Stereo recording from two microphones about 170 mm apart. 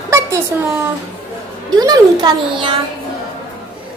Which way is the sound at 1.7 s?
25° right (ahead or behind).